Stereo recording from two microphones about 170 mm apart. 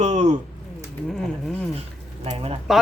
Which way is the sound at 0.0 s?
40° right (ahead or behind).